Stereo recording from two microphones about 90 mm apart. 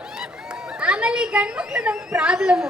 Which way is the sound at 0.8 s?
10° right (ahead or behind).